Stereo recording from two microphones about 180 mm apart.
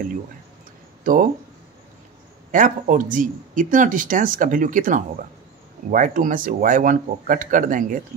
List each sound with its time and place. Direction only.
1.0 s speech: 45° right (ahead or behind)
2.5 s speech: 50° right (ahead or behind)